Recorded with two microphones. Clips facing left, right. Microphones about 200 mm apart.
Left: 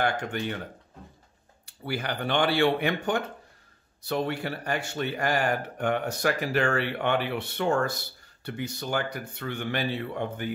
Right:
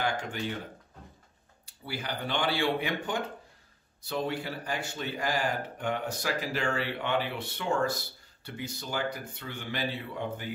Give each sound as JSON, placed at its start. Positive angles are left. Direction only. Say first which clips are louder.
{"t": 0.0, "sound": "speech", "louder": "left 4 dB", "side_deg": 60}
{"t": 1.9, "sound": "speech", "louder": "left 5 dB", "side_deg": 65}